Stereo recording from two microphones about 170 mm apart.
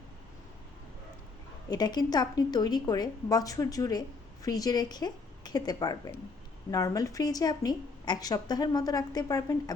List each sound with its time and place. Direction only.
1.7 s a woman's voice: 25° left (ahead or behind)